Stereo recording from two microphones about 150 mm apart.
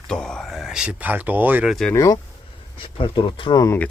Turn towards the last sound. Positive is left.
turn(degrees=25)  # may be behind; listen again after turning